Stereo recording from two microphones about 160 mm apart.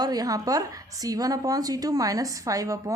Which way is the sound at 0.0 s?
25° right (ahead or behind).